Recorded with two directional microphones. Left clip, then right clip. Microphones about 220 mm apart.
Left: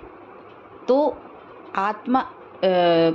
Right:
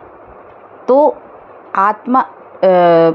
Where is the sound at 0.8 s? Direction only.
20° right (ahead or behind).